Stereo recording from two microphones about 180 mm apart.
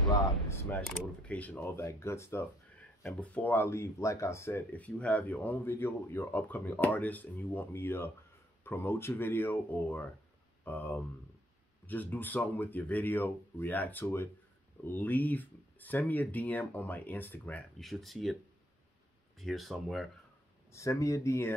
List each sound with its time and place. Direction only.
0.5 s speech: 10° left (ahead or behind)
19.3 s speech: centre (ahead or behind)
20.7 s speech: 15° left (ahead or behind)